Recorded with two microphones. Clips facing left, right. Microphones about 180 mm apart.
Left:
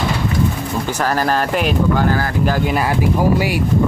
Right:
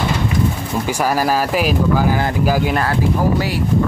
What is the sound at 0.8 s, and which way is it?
Speech, 10° right (ahead or behind).